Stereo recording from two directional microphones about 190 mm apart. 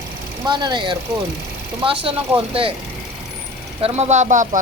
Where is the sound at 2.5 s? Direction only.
30° right (ahead or behind).